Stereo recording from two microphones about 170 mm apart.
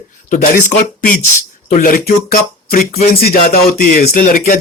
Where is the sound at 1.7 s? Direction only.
55° left (ahead or behind).